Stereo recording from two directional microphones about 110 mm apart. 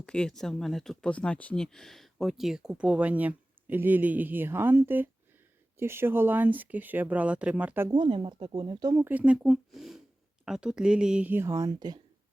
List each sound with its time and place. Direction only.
0.0 s speech: 10° left (ahead or behind); by 7.9 s 15° right (ahead or behind)
7.9 s speech: 50° right (ahead or behind)
9.0 s speech: 15° right (ahead or behind)
11.3 s speech: 30° right (ahead or behind)